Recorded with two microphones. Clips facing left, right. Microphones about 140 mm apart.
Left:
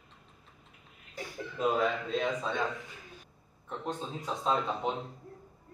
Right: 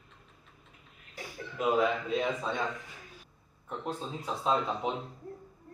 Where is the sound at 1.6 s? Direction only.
10° right (ahead or behind).